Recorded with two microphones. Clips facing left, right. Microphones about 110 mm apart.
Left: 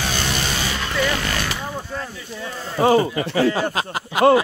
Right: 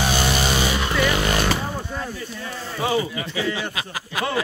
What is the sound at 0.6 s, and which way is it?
Vehicle, 15° right (ahead or behind).